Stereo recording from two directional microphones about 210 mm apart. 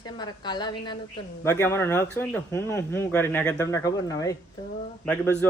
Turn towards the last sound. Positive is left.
turn(degrees=10)  # may be behind; listen again after turning